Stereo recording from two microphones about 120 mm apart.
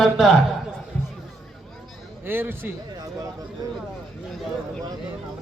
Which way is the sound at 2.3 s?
15° right (ahead or behind).